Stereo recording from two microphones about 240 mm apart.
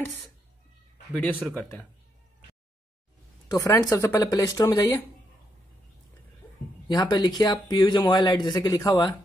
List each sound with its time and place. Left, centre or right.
1.1 s speech: centre
3.4 s speech: centre
6.9 s speech: centre